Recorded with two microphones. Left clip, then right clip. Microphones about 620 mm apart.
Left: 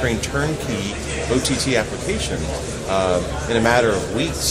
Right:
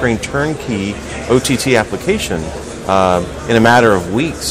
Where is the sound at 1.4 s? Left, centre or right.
Right.